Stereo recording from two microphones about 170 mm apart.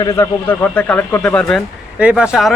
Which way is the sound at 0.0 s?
15° left (ahead or behind).